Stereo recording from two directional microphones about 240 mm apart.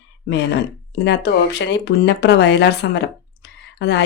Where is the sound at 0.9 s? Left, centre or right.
Left.